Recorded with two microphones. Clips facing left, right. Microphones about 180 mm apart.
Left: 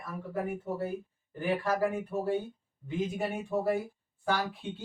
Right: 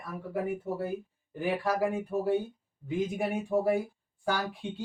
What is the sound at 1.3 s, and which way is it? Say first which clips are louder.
Speech: right 1 dB; 10° right (ahead or behind).